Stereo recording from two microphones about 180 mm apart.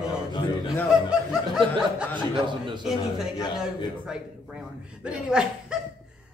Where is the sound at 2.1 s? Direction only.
25° right (ahead or behind).